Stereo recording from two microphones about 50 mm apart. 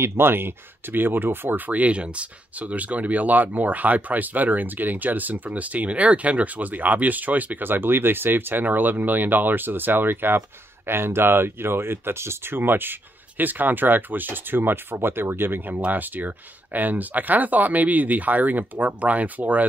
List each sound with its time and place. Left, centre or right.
0.0 s speech: right
1.7 s speech: right
15.7 s speech: right